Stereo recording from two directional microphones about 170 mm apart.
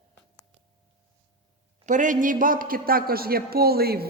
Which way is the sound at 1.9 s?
50° right (ahead or behind).